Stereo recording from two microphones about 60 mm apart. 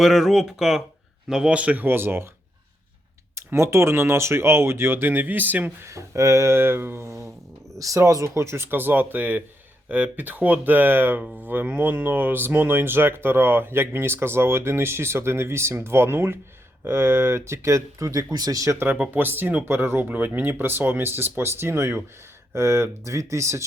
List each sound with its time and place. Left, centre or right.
0.0 s speech: centre; by 2.3 s right
3.3 s speech: right
5.8 s speech: right
7.1 s a sound: right
7.8 s speech: right
8.3 s speech: right
18.7 s speech: right